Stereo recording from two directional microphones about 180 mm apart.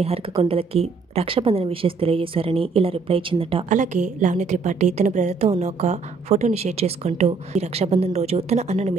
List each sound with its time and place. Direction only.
0.0 s a woman's voice: 35° right (ahead or behind)
3.6 s a woman's voice: 40° right (ahead or behind)